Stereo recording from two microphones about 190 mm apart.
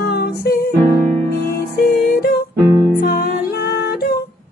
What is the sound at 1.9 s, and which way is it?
Music, 55° left (ahead or behind).